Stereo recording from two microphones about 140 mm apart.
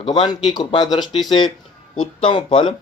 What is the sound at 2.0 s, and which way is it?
Speech, 35° left (ahead or behind).